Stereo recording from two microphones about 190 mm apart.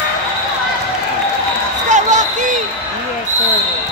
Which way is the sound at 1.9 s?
40° right (ahead or behind).